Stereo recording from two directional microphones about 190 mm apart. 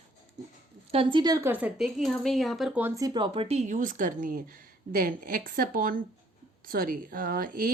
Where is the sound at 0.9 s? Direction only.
25° right (ahead or behind).